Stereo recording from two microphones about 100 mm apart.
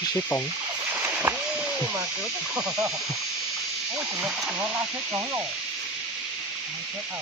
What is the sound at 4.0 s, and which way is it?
Speech, 10° right (ahead or behind).